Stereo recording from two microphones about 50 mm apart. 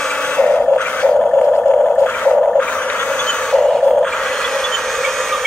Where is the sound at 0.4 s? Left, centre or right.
Left.